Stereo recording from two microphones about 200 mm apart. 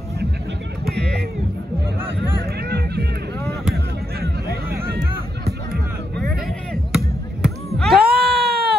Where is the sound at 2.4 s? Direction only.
50° right (ahead or behind).